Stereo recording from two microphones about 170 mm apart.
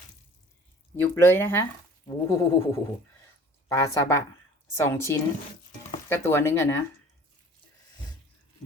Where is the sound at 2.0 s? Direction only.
20° left (ahead or behind).